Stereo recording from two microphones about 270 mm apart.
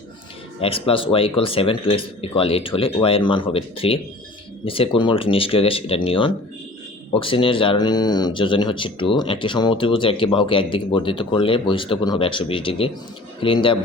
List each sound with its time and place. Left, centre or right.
0.6 s speech: centre